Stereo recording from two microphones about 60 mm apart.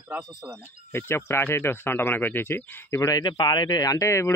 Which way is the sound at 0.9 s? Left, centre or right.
Left.